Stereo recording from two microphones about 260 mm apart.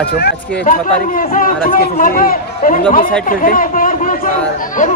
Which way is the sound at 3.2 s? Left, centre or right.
Left.